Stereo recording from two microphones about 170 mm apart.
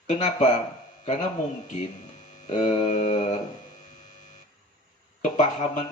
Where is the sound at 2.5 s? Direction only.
45° left (ahead or behind).